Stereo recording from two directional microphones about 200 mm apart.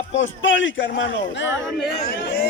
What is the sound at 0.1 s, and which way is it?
A man's voice, 70° left (ahead or behind).